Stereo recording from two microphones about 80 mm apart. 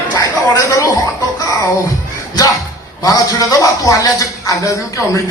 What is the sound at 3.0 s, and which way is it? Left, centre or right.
A man's voice, left.